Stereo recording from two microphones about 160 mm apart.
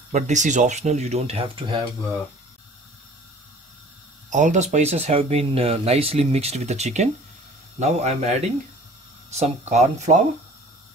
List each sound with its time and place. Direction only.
0.1 s speech: 50° right (ahead or behind); by 1.9 s 30° right (ahead or behind)
4.3 s speech: 50° right (ahead or behind)